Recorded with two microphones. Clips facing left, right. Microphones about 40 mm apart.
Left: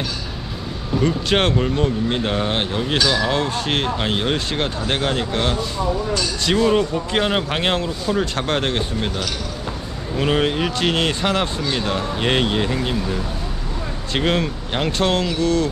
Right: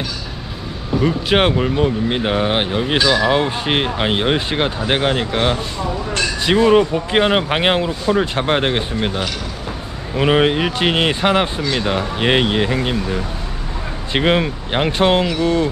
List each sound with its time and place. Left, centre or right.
0.9 s speech: centre